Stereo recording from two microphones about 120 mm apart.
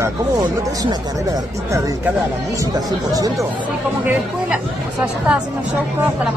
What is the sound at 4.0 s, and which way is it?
Speech, 15° right (ahead or behind).